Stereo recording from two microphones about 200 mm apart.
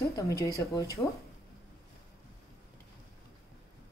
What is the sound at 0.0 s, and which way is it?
A woman's voice, 15° left (ahead or behind).